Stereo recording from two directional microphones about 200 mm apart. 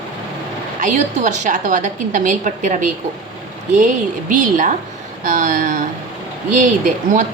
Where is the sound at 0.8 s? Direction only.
40° right (ahead or behind).